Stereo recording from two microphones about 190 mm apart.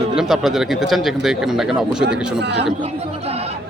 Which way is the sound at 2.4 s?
65° right (ahead or behind).